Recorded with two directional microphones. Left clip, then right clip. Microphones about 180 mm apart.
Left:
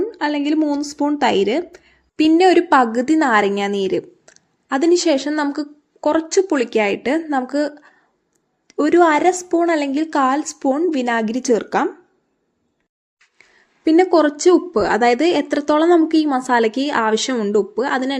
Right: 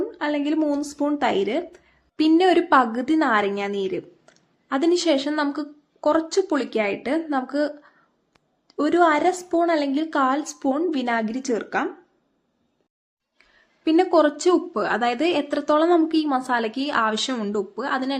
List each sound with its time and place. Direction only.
0.0 s a woman's voice: 20° left (ahead or behind)
13.4 s a woman's voice: 10° left (ahead or behind)